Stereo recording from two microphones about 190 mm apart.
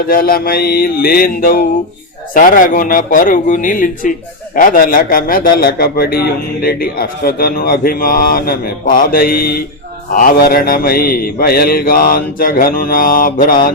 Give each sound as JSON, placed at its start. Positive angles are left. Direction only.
{"t": 0.1, "sound": "mantra", "side_deg": 50}